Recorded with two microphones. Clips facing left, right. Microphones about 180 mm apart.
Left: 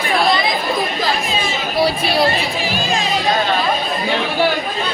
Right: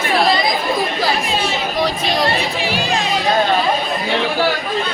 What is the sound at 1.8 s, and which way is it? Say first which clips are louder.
Chatter: left 4 dB; 10° left (ahead or behind).